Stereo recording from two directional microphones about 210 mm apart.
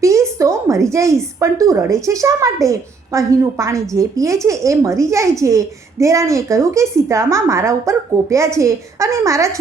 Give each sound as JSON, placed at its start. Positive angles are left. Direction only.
{"t": 0.0, "sound": "a woman's voice", "side_deg": -15}